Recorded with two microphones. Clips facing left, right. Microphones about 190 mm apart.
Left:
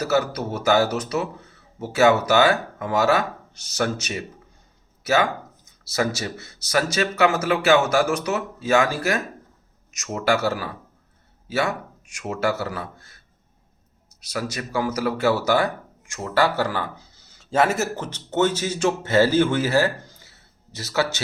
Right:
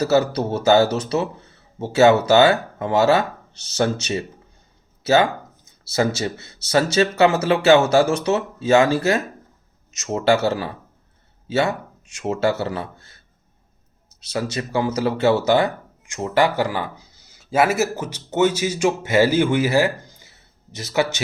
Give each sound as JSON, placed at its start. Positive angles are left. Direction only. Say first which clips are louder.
{"t": 0.0, "sound": "a man's voice", "louder": "right 4 dB", "side_deg": -25}
{"t": 14.2, "sound": "speech", "louder": "right 4 dB", "side_deg": -25}